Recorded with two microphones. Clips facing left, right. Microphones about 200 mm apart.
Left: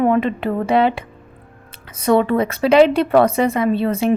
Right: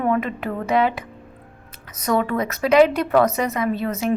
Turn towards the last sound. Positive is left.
turn(degrees=30)  # may be behind; listen again after turning